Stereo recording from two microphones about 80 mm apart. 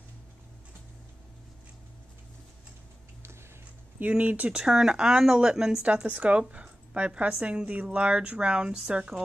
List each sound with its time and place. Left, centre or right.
4.0 s speech: right
4.6 s speech: centre